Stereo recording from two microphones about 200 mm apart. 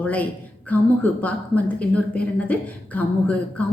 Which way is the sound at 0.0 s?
10° left (ahead or behind).